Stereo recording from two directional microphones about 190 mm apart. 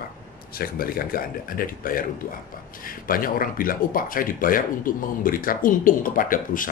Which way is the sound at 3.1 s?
50° left (ahead or behind).